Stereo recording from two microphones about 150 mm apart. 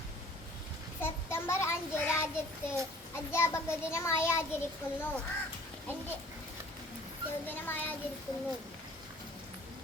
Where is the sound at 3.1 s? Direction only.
15° left (ahead or behind).